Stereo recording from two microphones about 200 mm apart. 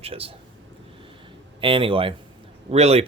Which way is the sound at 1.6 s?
25° right (ahead or behind).